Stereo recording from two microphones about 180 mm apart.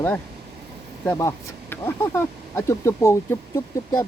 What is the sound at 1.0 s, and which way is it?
Speech, 15° left (ahead or behind).